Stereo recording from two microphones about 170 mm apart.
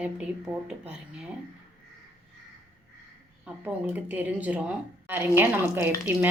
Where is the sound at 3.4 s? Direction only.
10° right (ahead or behind).